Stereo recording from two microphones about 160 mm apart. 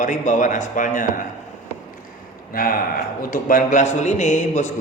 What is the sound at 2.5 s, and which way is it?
A man's voice, 65° left (ahead or behind).